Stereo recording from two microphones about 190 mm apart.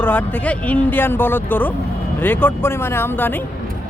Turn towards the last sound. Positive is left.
turn(degrees=10)  # may be behind; listen again after turning